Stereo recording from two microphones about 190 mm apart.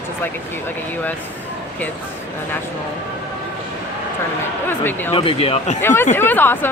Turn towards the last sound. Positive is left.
turn(degrees=10)  # may be behind; listen again after turning